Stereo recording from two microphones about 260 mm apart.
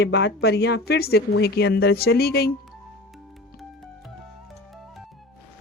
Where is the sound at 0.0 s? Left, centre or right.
Left.